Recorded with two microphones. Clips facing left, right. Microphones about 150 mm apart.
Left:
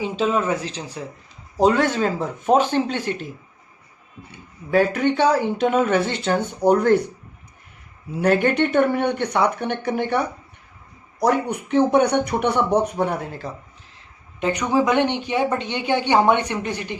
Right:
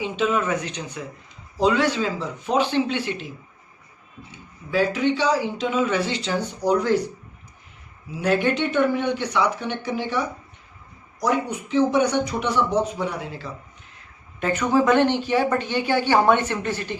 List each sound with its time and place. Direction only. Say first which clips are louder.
0.0 s speech: left 2 dB; 35° left (ahead or behind)
1.5 s speech: left 2 dB; 45° left (ahead or behind)
4.3 s speech: left 6 dB; 55° left (ahead or behind)
8.1 s speech: left 3 dB; 55° left (ahead or behind)
14.3 s speech: even; 15° left (ahead or behind)